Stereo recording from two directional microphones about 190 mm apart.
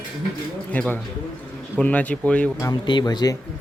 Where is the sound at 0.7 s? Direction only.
10° left (ahead or behind).